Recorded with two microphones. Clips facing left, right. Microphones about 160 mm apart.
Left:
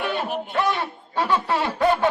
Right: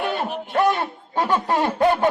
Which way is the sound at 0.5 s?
45° right (ahead or behind).